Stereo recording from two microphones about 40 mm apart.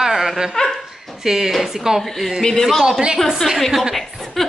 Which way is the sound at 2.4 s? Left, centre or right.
Centre.